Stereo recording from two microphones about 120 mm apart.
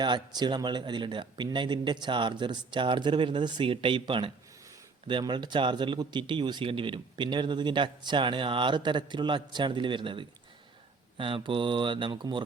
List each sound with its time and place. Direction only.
0.0 s a man's voice: 35° right (ahead or behind)